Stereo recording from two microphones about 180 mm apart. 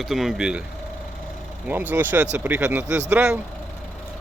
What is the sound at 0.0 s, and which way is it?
Speech, centre (ahead or behind).